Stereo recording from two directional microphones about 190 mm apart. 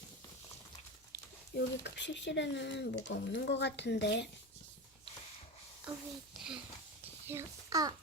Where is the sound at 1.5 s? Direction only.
65° left (ahead or behind).